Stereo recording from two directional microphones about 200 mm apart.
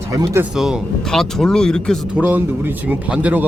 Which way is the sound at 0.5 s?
Centre (ahead or behind).